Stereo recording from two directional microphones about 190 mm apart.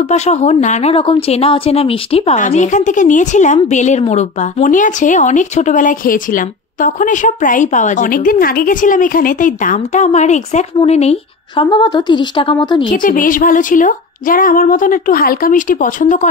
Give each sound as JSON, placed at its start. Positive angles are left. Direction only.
{"t": 0.1, "sound": "a woman's voice", "side_deg": 35}
{"t": 12.9, "sound": "a woman's voice", "side_deg": 45}